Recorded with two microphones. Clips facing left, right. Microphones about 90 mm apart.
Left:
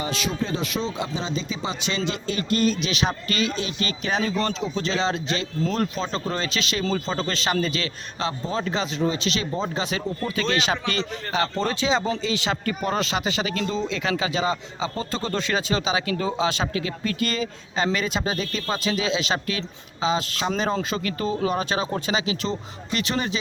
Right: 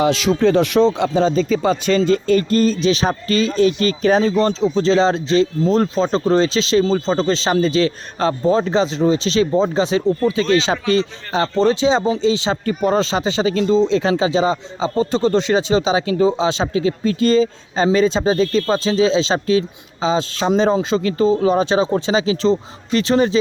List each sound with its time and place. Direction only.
0.0 s speech: 90° right; by 1.1 s 70° right (ahead or behind)
1.1 s speech: 50° right (ahead or behind); by 23.4 s 35° right (ahead or behind)